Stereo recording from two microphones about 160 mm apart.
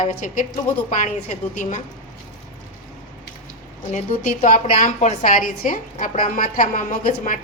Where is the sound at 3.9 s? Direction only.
45° left (ahead or behind).